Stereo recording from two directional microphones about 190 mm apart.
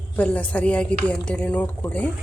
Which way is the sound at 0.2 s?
5° left (ahead or behind).